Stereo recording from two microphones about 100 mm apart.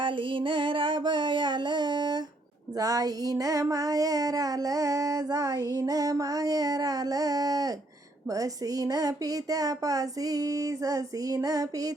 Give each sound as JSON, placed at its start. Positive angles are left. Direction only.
{"t": 0.0, "sound": "music", "side_deg": -55}
{"t": 2.7, "sound": "child singing", "side_deg": -35}